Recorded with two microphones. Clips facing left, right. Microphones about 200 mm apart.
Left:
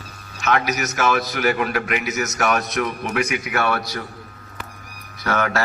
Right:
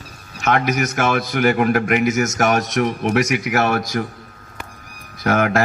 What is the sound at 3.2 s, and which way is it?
Speech, 70° right (ahead or behind).